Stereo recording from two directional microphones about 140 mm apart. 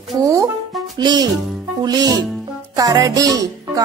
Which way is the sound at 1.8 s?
30° right (ahead or behind).